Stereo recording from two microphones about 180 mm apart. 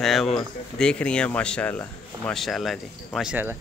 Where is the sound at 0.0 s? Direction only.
Centre (ahead or behind).